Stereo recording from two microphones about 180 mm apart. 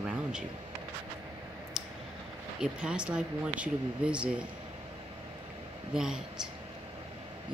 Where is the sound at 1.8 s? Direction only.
Centre (ahead or behind).